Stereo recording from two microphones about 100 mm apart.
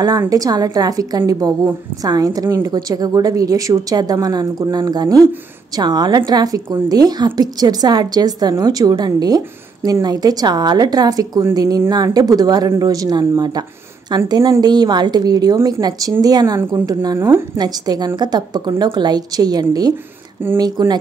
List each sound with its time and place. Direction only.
0.3 s a woman's voice: 40° right (ahead or behind)